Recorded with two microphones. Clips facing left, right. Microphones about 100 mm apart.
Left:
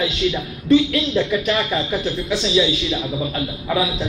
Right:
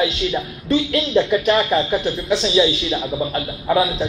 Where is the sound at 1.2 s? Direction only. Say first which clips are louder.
Right 5 dB; 35° right (ahead or behind).